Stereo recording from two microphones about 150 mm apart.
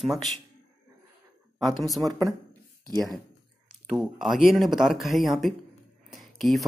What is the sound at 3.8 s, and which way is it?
Speech, 5° right (ahead or behind).